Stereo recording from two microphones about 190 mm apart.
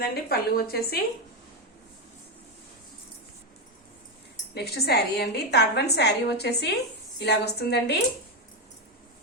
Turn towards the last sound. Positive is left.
turn(degrees=60)  # may be behind; listen again after turning